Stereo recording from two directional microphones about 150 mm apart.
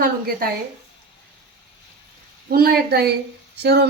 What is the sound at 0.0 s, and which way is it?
Speech, 75° right (ahead or behind).